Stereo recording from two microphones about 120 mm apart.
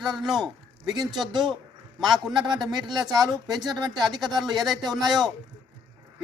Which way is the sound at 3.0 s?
30° right (ahead or behind).